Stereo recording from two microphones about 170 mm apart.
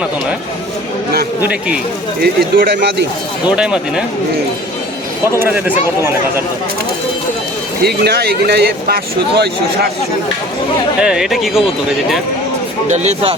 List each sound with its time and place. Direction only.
1.4 s speech: 5° right (ahead or behind)
2.2 s speech: 70° right (ahead or behind)
3.5 s speech: 5° right (ahead or behind)
5.4 s speech: 10° right (ahead or behind)
7.8 s speech: 70° right (ahead or behind)
11.0 s speech: 5° right (ahead or behind)
12.9 s speech: 40° right (ahead or behind)